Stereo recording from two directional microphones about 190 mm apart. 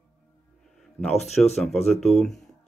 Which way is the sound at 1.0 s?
Centre (ahead or behind).